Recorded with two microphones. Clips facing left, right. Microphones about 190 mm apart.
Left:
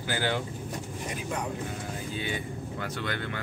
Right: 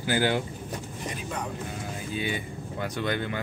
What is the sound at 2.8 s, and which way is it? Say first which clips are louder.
Speech: right 6 dB; 15° right (ahead or behind).